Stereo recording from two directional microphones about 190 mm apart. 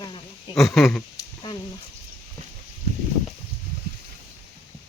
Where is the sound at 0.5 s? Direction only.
Centre (ahead or behind).